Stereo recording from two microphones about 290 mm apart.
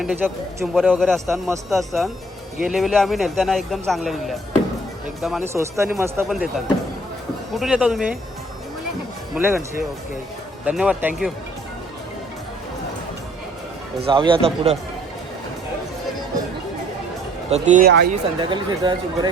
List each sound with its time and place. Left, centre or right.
0.0 s a man's voice: centre
7.5 s a man's voice: centre
9.3 s speech: centre
10.7 s a man's voice: centre
14.0 s speech: centre
17.5 s speech: right
18.3 s speech: centre